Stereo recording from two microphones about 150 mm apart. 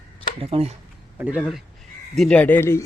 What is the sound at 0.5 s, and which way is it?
Speech, 40° right (ahead or behind).